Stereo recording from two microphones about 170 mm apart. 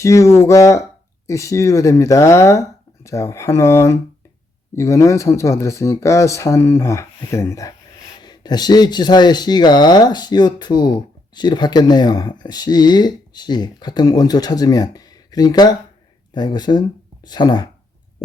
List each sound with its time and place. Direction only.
0.0 s speech: 15° left (ahead or behind)